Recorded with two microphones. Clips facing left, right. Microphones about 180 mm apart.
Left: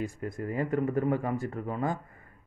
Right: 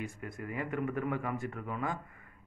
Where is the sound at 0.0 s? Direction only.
35° left (ahead or behind).